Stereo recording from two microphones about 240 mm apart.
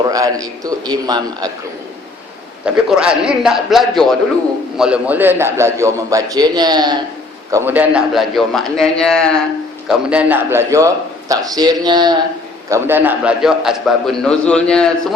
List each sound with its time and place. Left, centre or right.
0.0 s a man's voice: centre
2.6 s a man's voice: centre